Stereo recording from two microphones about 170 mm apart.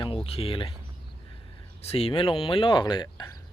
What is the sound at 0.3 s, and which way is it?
Speech, 35° left (ahead or behind).